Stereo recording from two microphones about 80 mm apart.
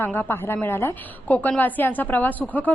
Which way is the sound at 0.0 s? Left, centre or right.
Left.